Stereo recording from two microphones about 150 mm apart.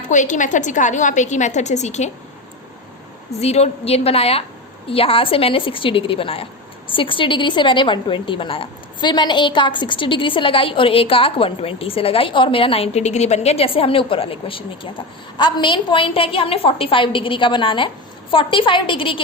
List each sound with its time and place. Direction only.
0.1 s a woman's voice: 55° left (ahead or behind)
3.4 s a woman's voice: 45° left (ahead or behind)